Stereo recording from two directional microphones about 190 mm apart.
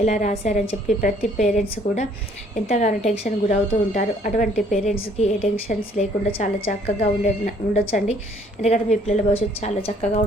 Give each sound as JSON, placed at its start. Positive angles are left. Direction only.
{"t": 0.0, "sound": "speech", "side_deg": 40}